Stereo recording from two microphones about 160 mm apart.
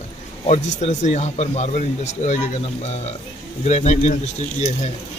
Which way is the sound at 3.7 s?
45° left (ahead or behind).